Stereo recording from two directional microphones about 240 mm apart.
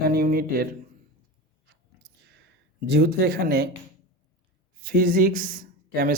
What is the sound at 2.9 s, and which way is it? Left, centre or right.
Speech, right.